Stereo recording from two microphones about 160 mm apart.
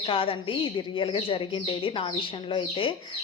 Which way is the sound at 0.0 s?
35° left (ahead or behind).